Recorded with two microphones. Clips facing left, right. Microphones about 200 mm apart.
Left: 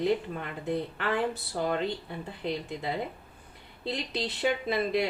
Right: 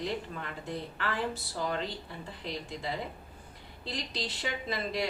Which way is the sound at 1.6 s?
60° left (ahead or behind).